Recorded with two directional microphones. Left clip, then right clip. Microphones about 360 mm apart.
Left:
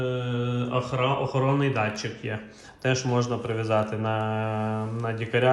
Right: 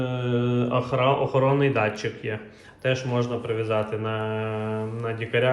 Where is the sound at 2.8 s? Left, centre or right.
Centre.